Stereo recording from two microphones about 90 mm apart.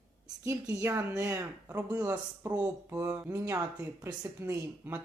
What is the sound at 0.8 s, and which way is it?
Speech, 30° right (ahead or behind).